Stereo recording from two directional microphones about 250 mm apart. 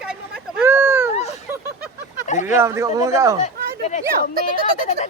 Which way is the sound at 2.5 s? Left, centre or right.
Centre.